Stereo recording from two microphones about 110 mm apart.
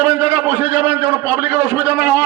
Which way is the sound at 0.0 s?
20° right (ahead or behind).